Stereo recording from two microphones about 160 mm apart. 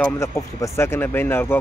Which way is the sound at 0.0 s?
20° left (ahead or behind).